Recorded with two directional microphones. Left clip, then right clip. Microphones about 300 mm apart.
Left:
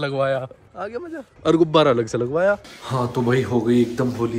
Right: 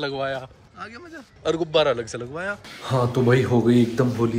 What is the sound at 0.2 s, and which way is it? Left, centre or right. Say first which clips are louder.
A man's voice: left 6 dB; centre.